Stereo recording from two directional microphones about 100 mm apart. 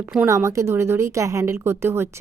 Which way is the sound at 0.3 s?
30° right (ahead or behind).